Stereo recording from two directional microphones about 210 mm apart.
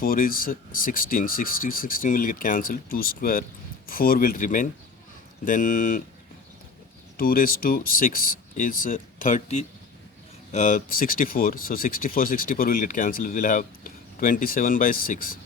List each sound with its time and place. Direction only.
0.0 s speech: 45° left (ahead or behind)
7.2 s speech: 45° left (ahead or behind)